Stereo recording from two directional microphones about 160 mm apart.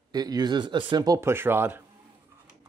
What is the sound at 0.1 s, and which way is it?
Speech, 25° right (ahead or behind).